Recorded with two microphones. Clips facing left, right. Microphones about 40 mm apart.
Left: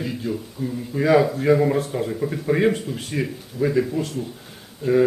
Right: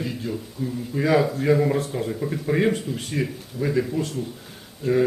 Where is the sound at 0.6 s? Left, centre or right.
Centre.